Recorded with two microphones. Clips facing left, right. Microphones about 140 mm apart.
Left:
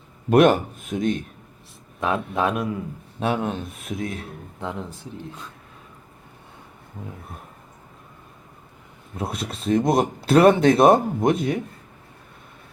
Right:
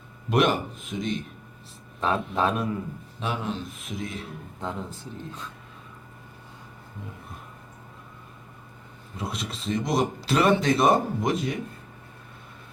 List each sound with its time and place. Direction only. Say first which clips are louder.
0.3 s a man's voice: left 7 dB; 50° left (ahead or behind)
2.0 s a man's voice: left 2 dB; 15° left (ahead or behind)
3.2 s speech: left 6 dB; 55° left (ahead or behind)
4.6 s a man's voice: left 2 dB; 15° left (ahead or behind)
9.1 s speech: left 4 dB; 55° left (ahead or behind)